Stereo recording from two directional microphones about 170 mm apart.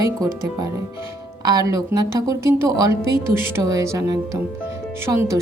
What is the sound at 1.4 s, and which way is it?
Speech, 20° right (ahead or behind).